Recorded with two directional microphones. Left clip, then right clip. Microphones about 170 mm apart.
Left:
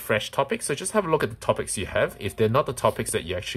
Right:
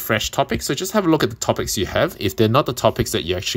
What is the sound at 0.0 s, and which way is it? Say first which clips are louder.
Speech: right 4 dB; 20° right (ahead or behind).